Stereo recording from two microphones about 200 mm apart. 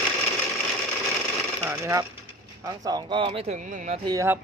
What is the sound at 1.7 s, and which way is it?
Speech, 15° right (ahead or behind).